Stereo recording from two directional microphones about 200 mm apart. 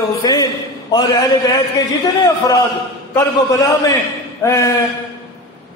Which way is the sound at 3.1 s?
15° left (ahead or behind).